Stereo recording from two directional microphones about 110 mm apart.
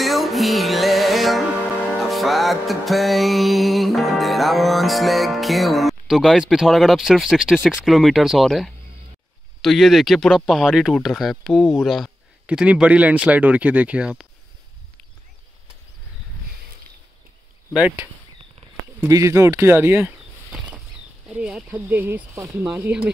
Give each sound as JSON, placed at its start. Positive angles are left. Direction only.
{"t": 0.0, "sound": "music", "side_deg": 0}
{"t": 12.4, "sound": "speech", "side_deg": -10}
{"t": 17.7, "sound": "speech", "side_deg": -15}
{"t": 19.0, "sound": "speech", "side_deg": -30}
{"t": 21.3, "sound": "speech", "side_deg": -10}